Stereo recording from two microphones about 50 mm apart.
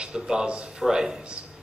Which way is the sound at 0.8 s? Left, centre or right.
Centre.